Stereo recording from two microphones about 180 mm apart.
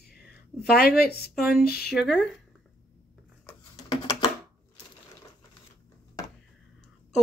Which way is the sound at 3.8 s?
25° left (ahead or behind).